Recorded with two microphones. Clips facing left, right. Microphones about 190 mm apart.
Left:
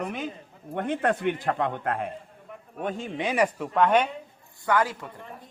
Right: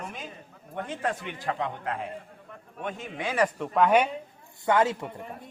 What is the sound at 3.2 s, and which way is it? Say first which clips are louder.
Speech: left 2 dB; 15° left (ahead or behind).